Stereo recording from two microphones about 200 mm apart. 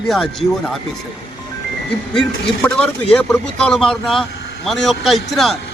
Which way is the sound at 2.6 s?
5° left (ahead or behind).